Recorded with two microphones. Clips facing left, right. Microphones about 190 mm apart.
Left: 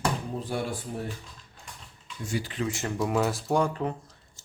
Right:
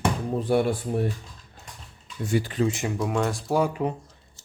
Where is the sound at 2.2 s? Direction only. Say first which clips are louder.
Right 7 dB; 55° right (ahead or behind).